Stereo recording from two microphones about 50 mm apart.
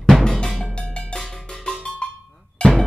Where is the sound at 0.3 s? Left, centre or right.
Centre.